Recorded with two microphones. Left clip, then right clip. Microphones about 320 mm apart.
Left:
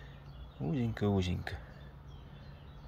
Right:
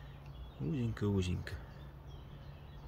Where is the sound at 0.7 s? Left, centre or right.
Centre.